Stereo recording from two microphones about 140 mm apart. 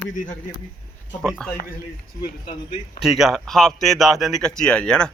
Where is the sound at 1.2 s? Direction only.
5° left (ahead or behind).